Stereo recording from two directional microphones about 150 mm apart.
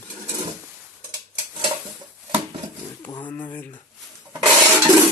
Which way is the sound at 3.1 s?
30° left (ahead or behind).